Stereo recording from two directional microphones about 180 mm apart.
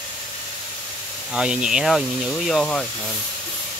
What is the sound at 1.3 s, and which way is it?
Speech, 5° right (ahead or behind).